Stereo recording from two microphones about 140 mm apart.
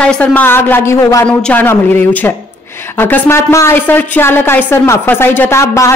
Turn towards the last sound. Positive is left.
turn(degrees=20)  # may be behind; listen again after turning